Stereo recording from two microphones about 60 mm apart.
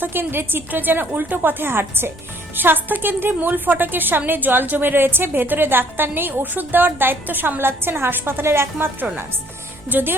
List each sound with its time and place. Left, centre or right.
0.0 s a woman's voice: right